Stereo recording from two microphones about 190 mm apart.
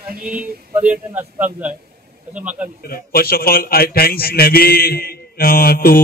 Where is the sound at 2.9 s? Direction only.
55° left (ahead or behind).